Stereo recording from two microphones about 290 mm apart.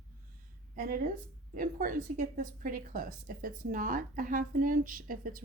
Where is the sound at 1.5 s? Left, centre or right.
Right.